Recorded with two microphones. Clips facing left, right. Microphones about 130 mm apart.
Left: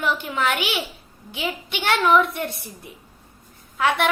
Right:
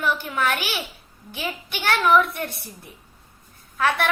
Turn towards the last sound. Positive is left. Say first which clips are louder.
# left 1 dB
turn(degrees=15)  # may be behind; listen again after turning